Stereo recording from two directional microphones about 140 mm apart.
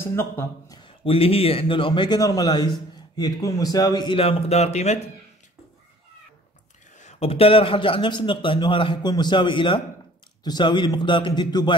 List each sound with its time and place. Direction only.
0.0 s a man's voice: 15° left (ahead or behind)
0.7 s a man's voice: 40° left (ahead or behind)
7.0 s a man's voice: 50° left (ahead or behind); by 11.7 s 35° left (ahead or behind)